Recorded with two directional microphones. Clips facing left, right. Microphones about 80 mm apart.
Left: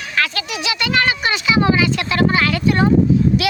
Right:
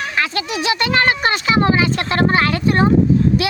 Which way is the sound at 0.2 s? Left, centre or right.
Right.